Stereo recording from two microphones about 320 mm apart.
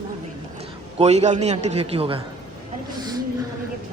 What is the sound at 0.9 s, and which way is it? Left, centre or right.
A man's voice, right.